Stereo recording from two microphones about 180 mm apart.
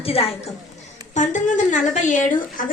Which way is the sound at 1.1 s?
45° left (ahead or behind).